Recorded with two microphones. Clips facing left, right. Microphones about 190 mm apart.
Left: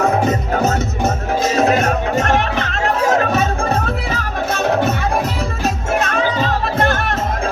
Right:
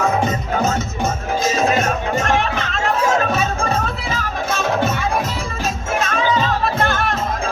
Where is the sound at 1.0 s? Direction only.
65° left (ahead or behind).